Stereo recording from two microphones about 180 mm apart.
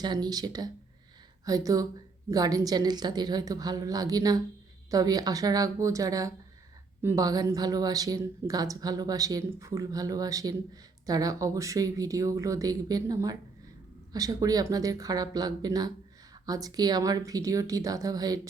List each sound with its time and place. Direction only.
0.0 s a woman's voice: 25° right (ahead or behind)